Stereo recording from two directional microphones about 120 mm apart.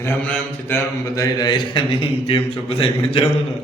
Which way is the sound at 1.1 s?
30° left (ahead or behind).